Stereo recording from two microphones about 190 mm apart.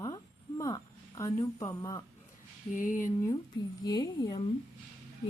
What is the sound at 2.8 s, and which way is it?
Speech, 45° left (ahead or behind).